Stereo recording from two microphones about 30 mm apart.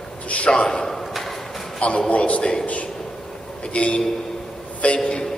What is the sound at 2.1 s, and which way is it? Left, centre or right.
Speech, left.